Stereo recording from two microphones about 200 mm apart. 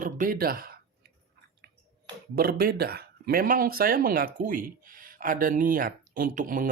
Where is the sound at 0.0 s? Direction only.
45° right (ahead or behind).